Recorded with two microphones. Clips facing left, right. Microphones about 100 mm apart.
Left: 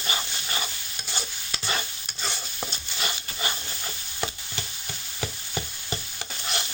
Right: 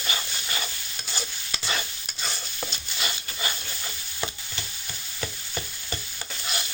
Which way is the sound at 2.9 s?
30° left (ahead or behind).